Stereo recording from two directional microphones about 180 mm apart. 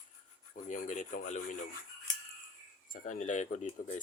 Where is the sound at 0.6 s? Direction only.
45° left (ahead or behind).